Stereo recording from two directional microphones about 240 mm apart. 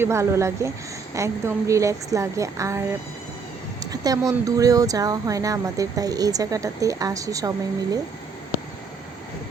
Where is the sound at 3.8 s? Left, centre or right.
Centre.